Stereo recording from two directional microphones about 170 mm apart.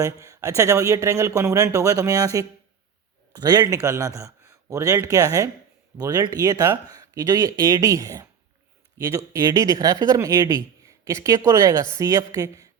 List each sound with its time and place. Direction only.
0.0 s speech: 20° right (ahead or behind)